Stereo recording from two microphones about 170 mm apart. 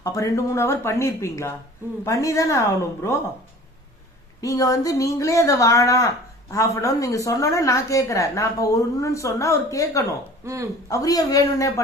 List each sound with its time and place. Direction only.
0.0 s a woman's voice: 20° left (ahead or behind)
4.4 s a woman's voice: 20° left (ahead or behind)
10.4 s speech: 20° right (ahead or behind)
10.8 s a woman's voice: 20° left (ahead or behind)